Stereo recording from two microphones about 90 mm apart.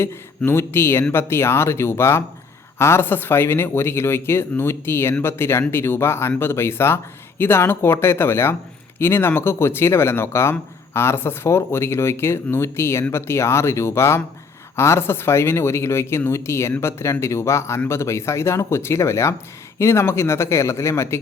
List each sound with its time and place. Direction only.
0.0 s speech: 25° left (ahead or behind)